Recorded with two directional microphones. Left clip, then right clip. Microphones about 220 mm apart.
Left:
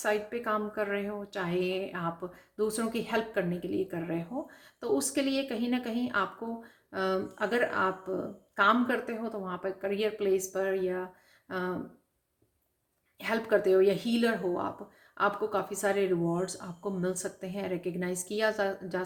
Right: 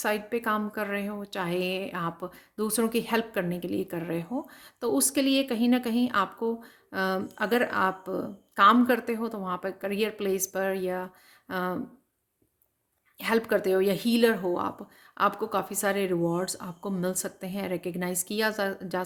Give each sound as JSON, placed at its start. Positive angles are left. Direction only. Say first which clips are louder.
{"t": 0.0, "sound": "a woman's voice", "louder": "right 2 dB", "side_deg": -45}
{"t": 13.1, "sound": "a woman's voice", "louder": "right 2 dB", "side_deg": -45}